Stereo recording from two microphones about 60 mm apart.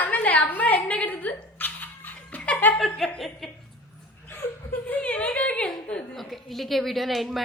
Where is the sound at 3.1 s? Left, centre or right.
Centre.